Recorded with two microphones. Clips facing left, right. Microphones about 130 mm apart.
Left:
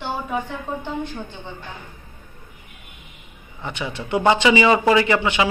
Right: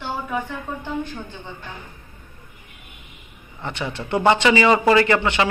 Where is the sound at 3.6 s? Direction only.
15° left (ahead or behind).